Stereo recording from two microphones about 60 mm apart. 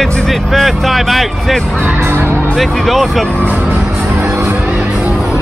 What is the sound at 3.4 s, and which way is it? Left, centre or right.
Music, right.